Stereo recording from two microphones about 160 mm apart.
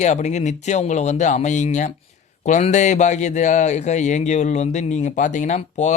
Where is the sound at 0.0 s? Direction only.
45° left (ahead or behind).